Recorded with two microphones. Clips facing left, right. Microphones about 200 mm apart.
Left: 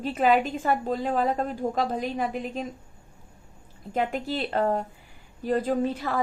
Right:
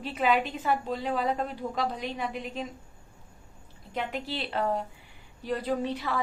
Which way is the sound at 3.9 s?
45° left (ahead or behind).